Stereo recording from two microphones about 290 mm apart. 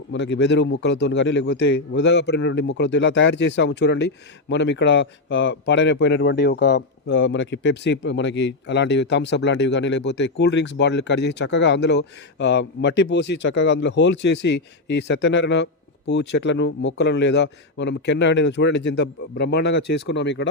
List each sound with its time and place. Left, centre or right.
0.1 s a man's voice: left